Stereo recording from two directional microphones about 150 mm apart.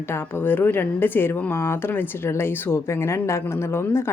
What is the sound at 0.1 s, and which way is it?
Speech, 15° left (ahead or behind).